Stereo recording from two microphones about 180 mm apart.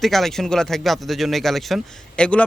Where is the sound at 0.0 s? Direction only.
Centre (ahead or behind).